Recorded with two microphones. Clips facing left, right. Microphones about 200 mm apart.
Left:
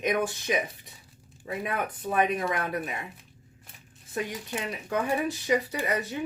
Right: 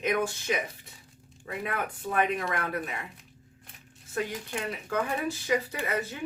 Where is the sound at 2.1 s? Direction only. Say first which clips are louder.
Left 2 dB; 20° left (ahead or behind).